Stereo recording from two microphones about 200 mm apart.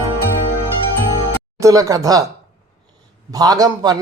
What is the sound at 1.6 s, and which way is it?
Speech, 15° right (ahead or behind).